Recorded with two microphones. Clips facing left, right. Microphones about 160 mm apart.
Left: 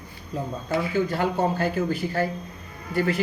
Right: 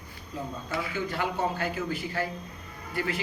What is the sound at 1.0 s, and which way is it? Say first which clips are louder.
A man's voice: left 5 dB; 35° left (ahead or behind).